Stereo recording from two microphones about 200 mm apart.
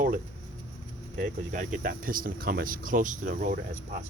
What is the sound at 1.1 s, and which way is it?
Speech, 40° right (ahead or behind).